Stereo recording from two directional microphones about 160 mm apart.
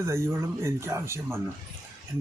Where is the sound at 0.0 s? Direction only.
15° right (ahead or behind).